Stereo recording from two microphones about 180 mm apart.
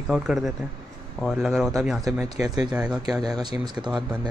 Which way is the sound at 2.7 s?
5° right (ahead or behind).